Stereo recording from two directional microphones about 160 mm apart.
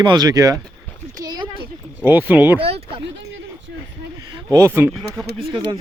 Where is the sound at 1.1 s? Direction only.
25° right (ahead or behind).